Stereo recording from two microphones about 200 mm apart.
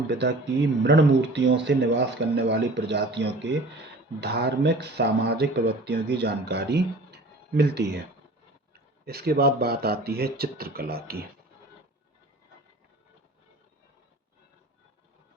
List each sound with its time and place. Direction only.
0.1 s speech: 60° right (ahead or behind)